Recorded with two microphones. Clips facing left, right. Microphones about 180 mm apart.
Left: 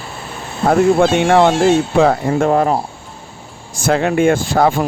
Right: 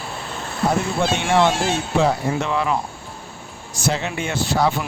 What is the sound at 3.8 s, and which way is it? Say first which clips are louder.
Speech: left 11 dB; 55° left (ahead or behind).